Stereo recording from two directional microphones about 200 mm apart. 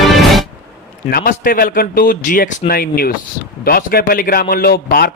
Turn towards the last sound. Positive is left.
turn(degrees=50)  # may be behind; listen again after turning